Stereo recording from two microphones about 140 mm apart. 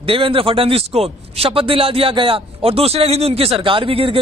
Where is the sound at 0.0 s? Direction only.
40° right (ahead or behind).